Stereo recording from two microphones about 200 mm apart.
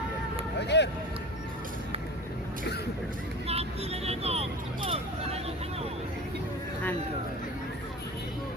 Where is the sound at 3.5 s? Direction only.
30° right (ahead or behind).